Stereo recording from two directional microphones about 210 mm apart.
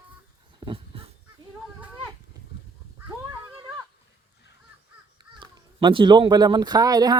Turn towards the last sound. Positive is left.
turn(degrees=-15)  # may be behind; listen again after turning